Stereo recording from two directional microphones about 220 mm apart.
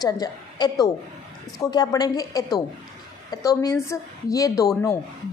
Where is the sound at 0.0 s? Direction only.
15° left (ahead or behind).